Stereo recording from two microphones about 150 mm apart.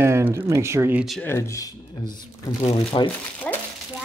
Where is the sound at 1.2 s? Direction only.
15° left (ahead or behind).